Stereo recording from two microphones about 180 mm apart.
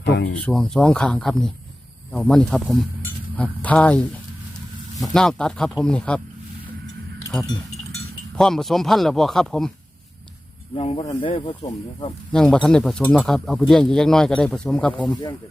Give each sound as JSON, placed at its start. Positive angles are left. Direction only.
{"t": 0.0, "sound": "speech", "side_deg": 70}
{"t": 0.3, "sound": "speech", "side_deg": 5}
{"t": 5.1, "sound": "speech", "side_deg": 5}
{"t": 8.4, "sound": "speech", "side_deg": 5}
{"t": 10.8, "sound": "speech", "side_deg": 30}
{"t": 12.3, "sound": "speech", "side_deg": 5}
{"t": 15.1, "sound": "speech", "side_deg": 25}